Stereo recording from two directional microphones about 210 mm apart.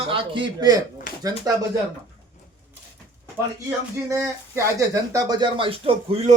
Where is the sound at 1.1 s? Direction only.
40° left (ahead or behind).